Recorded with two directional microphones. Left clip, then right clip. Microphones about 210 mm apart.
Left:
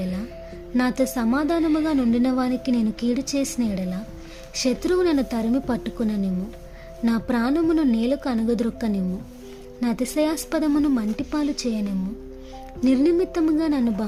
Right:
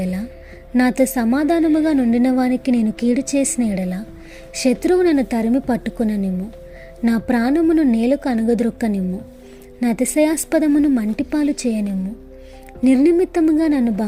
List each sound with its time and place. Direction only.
0.8 s a woman's voice: 15° right (ahead or behind)